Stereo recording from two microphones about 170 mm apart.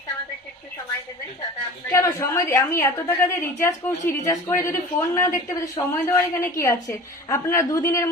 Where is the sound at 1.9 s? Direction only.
20° left (ahead or behind).